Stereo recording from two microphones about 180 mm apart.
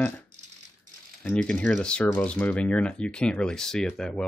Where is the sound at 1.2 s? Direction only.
5° left (ahead or behind).